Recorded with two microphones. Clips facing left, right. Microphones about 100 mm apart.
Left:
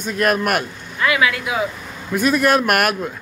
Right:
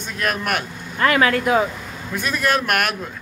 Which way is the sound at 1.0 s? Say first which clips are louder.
Right 2 dB; 45° right (ahead or behind).